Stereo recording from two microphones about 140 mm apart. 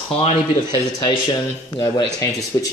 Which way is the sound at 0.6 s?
30° left (ahead or behind).